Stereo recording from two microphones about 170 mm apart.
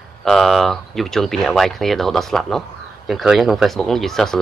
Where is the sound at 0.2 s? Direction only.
Centre (ahead or behind).